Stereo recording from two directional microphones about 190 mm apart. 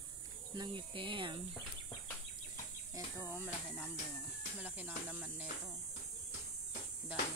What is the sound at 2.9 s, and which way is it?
Speech, 15° right (ahead or behind).